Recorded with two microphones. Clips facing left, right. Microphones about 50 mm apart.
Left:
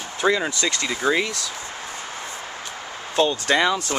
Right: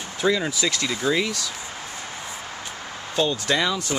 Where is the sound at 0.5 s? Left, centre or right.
Centre.